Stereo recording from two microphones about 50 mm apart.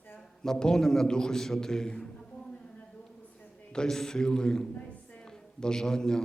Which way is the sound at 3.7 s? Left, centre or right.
Centre.